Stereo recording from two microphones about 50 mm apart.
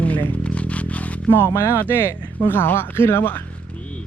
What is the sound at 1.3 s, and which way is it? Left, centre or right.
Speech, left.